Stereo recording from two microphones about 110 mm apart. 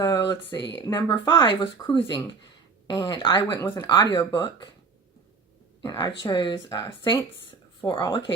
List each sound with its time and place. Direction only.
0.5 s speech: 35° left (ahead or behind)
5.8 s speech: 30° left (ahead or behind)
6.1 s speech: 45° left (ahead or behind)